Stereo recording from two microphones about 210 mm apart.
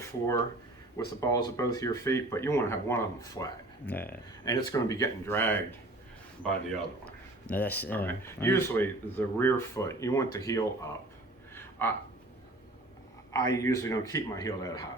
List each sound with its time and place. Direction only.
0.0 s speech: 15° left (ahead or behind)
4.4 s speech: 20° left (ahead or behind)
7.0 s speech: 5° left (ahead or behind)
11.5 s a sound: 10° left (ahead or behind)
13.3 s speech: 15° left (ahead or behind)